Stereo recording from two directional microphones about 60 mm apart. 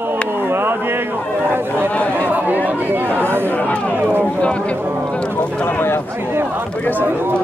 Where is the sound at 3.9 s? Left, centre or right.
Right.